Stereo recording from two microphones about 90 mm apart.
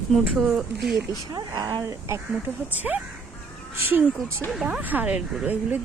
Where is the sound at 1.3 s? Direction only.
50° right (ahead or behind).